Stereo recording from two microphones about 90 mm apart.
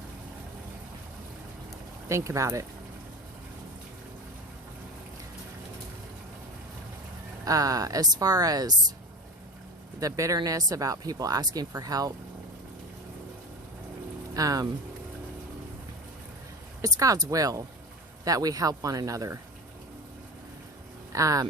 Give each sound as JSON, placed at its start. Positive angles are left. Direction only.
{"t": 2.0, "sound": "speech", "side_deg": -35}
{"t": 7.4, "sound": "speech", "side_deg": -40}
{"t": 10.0, "sound": "speech", "side_deg": -40}
{"t": 14.3, "sound": "speech", "side_deg": -40}
{"t": 16.8, "sound": "speech", "side_deg": -40}
{"t": 21.1, "sound": "speech", "side_deg": -40}